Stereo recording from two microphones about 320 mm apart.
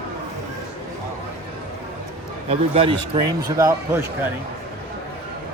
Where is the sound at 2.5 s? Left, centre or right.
Centre.